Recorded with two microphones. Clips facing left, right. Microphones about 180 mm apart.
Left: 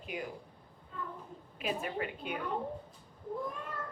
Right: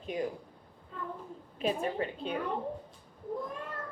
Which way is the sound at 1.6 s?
30° right (ahead or behind).